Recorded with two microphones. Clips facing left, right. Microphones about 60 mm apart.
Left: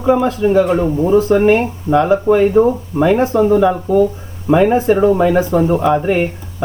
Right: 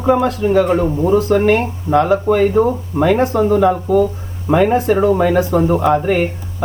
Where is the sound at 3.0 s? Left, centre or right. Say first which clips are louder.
Left 1 dB; centre.